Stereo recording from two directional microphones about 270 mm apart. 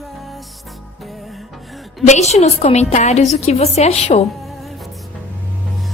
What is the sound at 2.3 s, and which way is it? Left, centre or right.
A woman's voice, left.